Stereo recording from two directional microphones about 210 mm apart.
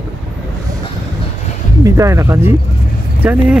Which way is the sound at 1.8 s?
15° right (ahead or behind).